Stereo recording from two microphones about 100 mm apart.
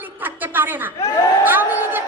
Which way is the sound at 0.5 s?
20° right (ahead or behind).